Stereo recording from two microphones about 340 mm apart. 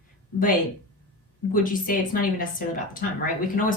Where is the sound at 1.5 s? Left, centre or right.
Left.